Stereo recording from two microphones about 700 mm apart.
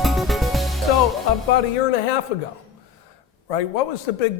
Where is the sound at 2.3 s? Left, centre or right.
Left.